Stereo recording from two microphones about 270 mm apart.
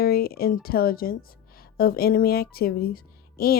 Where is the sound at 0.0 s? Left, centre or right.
Left.